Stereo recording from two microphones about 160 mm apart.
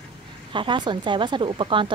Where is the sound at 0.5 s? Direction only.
30° right (ahead or behind).